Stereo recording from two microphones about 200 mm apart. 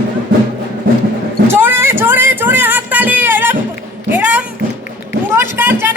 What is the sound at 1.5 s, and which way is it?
Music, 10° right (ahead or behind).